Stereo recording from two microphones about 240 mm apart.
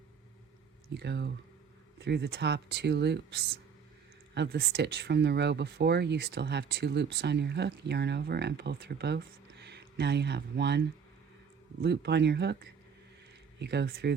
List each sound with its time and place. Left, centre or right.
0.9 s speech: right
13.6 s speech: right